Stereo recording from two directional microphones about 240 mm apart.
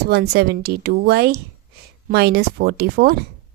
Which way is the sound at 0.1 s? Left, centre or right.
Right.